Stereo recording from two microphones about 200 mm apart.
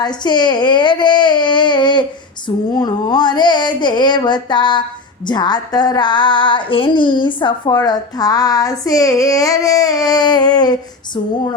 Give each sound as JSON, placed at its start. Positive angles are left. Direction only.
{"t": 0.0, "sound": "female singing", "side_deg": 20}